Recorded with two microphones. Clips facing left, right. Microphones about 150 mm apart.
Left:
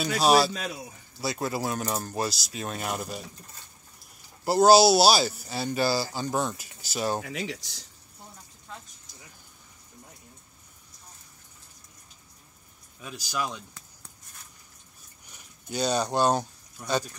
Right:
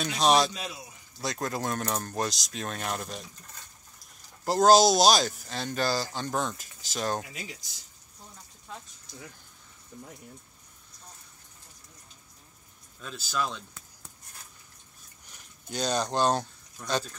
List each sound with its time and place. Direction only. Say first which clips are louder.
0.0 s speech: left 2 dB; 5° left (ahead or behind)
0.5 s speech: left 4 dB; 45° left (ahead or behind)
1.2 s speech: left 2 dB; 5° left (ahead or behind)
4.5 s speech: left 2 dB; 10° left (ahead or behind)
7.2 s speech: left 9 dB; 80° left
13.0 s speech: even; 10° left (ahead or behind)
15.2 s speech: left 3 dB; 10° left (ahead or behind)